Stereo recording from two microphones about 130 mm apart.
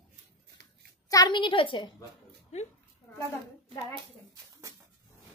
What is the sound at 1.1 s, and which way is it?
Speech, 35° left (ahead or behind).